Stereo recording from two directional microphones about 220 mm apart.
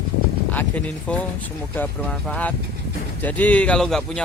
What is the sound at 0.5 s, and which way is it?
Speech, 5° left (ahead or behind).